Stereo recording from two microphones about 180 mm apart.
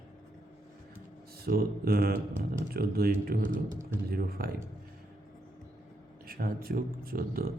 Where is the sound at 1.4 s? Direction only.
60° right (ahead or behind).